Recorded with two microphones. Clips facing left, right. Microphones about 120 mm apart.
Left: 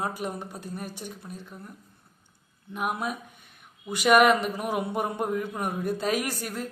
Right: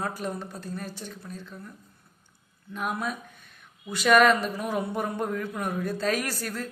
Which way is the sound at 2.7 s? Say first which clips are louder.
Left 1 dB; 15° left (ahead or behind).